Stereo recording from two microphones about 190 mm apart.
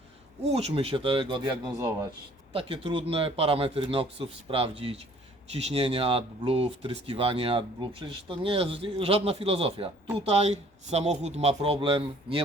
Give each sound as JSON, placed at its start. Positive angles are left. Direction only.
{"t": 0.5, "sound": "speech", "side_deg": -30}